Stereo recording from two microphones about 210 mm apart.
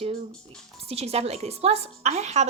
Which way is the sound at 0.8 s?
30° right (ahead or behind).